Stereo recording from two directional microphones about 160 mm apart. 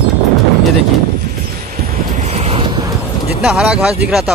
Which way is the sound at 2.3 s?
40° right (ahead or behind).